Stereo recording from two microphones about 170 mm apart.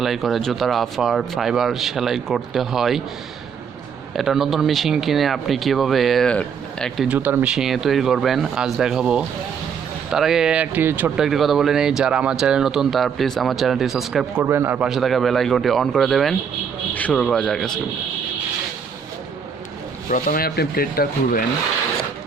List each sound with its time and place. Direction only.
0.0 s speech: centre (ahead or behind)
4.1 s speech: centre (ahead or behind)
14.4 s speech: 15° right (ahead or behind); by 17.7 s 5° left (ahead or behind)
20.1 s speech: 50° left (ahead or behind)